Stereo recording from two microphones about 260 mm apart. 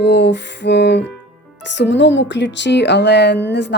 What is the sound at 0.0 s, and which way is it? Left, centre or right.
Music, left.